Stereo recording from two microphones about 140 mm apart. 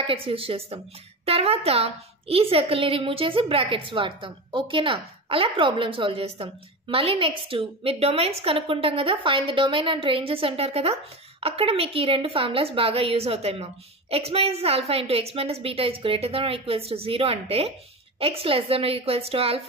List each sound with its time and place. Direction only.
0.0 s a woman's voice: 40° right (ahead or behind)